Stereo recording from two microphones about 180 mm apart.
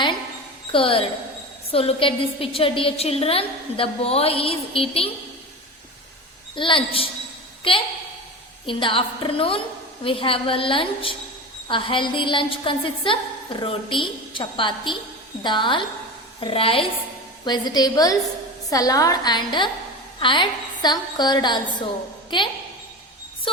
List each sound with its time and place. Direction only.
0.7 s a woman's voice: 30° left (ahead or behind)
6.6 s a woman's voice: 30° left (ahead or behind)